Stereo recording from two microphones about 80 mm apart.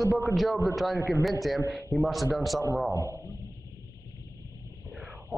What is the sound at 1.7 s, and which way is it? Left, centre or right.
Speech, centre.